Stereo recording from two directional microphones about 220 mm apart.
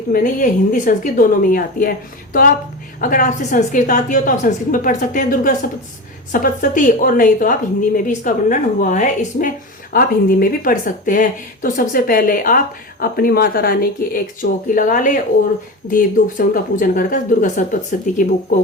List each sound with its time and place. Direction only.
0.1 s speech: 40° left (ahead or behind)